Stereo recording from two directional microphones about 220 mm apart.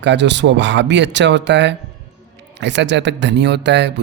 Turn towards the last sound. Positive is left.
turn(degrees=-50)  # may be behind; listen again after turning